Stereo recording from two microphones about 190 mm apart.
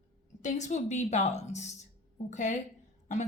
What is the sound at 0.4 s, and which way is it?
A woman's voice, 40° left (ahead or behind).